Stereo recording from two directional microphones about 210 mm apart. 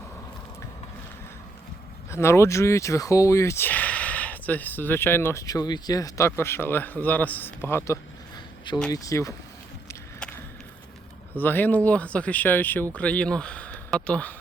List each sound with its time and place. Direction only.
2.0 s speech: 10° left (ahead or behind)
9.9 s a sound: 10° left (ahead or behind)
11.3 s speech: 10° left (ahead or behind)